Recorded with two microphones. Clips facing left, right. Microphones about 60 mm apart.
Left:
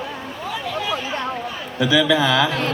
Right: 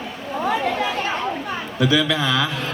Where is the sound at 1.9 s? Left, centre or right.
Centre.